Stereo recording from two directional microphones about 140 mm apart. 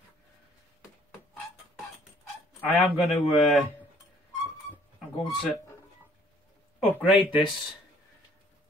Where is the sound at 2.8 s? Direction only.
Centre (ahead or behind).